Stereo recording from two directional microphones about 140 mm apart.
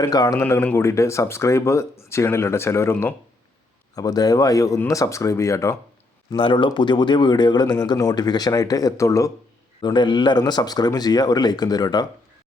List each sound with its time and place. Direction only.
0.0 s speech: 25° left (ahead or behind)
0.4 s speech: 15° left (ahead or behind)
6.3 s speech: 35° left (ahead or behind)
9.8 s speech: 35° left (ahead or behind)